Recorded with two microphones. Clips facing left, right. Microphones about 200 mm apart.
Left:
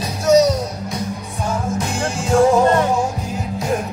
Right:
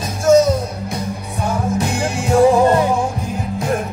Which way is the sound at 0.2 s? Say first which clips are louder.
Right 1 dB; 50° right (ahead or behind).